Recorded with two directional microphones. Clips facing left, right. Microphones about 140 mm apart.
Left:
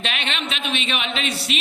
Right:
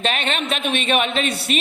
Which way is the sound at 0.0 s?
45° right (ahead or behind).